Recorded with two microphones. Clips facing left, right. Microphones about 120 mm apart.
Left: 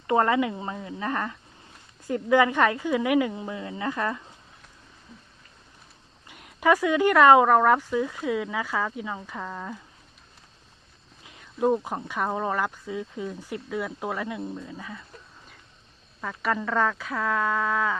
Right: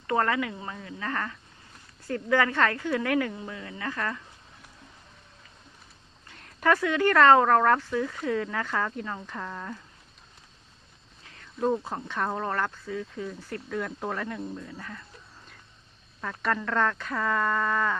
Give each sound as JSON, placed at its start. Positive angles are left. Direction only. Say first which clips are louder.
{"t": 0.1, "sound": "speech", "louder": "left 4 dB", "side_deg": 20}
{"t": 6.2, "sound": "speech", "louder": "left 3 dB", "side_deg": 10}
{"t": 11.2, "sound": "speech", "louder": "left 3 dB", "side_deg": 15}
{"t": 16.2, "sound": "speech", "louder": "left 1 dB", "side_deg": 5}